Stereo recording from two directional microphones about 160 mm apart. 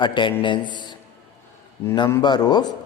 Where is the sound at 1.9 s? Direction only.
25° left (ahead or behind).